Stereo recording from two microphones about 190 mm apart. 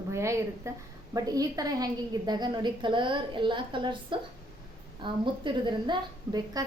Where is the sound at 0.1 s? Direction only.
15° right (ahead or behind).